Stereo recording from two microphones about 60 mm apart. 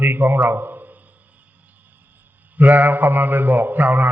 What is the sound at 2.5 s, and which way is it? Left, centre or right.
A man's voice, right.